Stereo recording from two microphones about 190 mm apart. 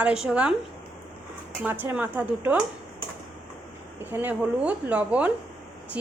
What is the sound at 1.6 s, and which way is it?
A woman's voice, 10° right (ahead or behind).